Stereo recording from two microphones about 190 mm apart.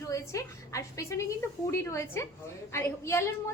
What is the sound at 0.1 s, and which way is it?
A woman's voice, 15° left (ahead or behind).